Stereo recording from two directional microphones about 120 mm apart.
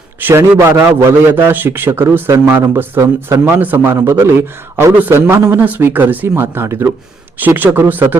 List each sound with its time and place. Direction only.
0.2 s a man's voice: 20° right (ahead or behind)